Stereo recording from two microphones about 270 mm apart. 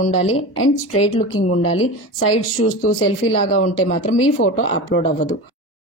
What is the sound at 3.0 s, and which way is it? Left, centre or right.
A woman's voice, left.